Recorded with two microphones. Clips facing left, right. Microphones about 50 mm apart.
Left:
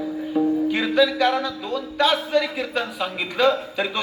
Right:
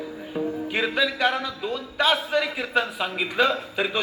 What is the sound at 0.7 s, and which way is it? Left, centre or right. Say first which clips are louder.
A man's voice: left 5 dB; centre.